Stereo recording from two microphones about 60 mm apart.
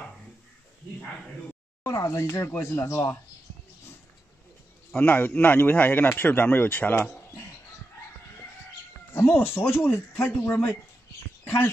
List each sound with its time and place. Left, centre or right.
1.8 s speech: left
4.9 s speech: left
9.1 s speech: left